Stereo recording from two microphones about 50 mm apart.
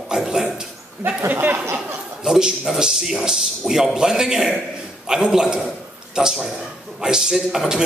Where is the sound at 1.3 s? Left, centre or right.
Right.